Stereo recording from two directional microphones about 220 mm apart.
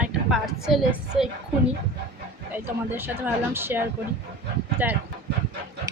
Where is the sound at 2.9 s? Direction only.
10° right (ahead or behind).